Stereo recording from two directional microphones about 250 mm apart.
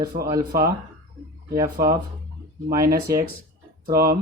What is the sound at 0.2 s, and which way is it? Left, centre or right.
Speech, centre.